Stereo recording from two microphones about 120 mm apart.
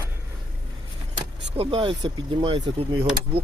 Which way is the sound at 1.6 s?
45° right (ahead or behind).